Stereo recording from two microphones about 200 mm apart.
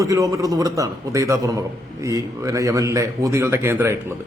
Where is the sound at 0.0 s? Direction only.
15° right (ahead or behind).